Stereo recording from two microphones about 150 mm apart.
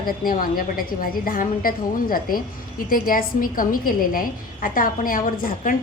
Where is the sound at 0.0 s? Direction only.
70° left (ahead or behind).